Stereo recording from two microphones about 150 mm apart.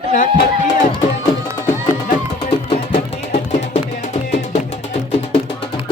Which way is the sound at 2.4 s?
45° left (ahead or behind).